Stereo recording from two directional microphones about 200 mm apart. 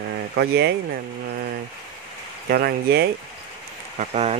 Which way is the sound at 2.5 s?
50° right (ahead or behind).